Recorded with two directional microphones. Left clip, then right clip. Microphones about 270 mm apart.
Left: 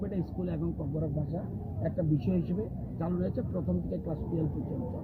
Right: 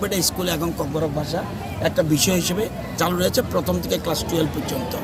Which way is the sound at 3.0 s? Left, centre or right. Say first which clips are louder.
Right 15 dB; centre.